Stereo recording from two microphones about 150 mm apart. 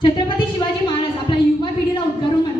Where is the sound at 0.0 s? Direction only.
30° left (ahead or behind).